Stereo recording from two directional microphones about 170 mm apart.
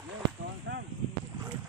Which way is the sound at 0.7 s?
90° right.